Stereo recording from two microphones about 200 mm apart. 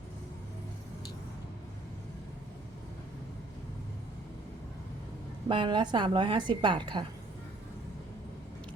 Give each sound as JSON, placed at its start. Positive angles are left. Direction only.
{"t": 5.5, "sound": "a woman's voice", "side_deg": -25}